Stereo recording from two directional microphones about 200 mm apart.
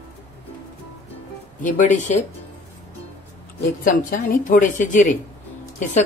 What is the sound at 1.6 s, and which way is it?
Speech, 40° left (ahead or behind).